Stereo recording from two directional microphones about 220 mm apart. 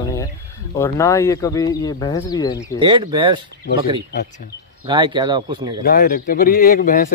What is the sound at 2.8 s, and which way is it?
Speech, 20° right (ahead or behind).